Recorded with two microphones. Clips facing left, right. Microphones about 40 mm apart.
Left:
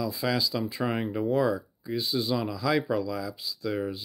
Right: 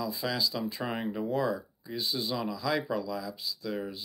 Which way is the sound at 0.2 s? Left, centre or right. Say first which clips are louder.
Left 4 dB; centre.